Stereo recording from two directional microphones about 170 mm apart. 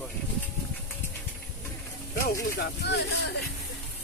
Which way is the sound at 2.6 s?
75° left (ahead or behind).